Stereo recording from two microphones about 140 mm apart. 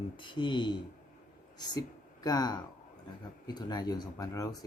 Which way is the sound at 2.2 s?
30° left (ahead or behind).